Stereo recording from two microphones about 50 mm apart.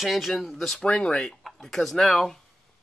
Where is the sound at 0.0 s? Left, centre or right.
Centre.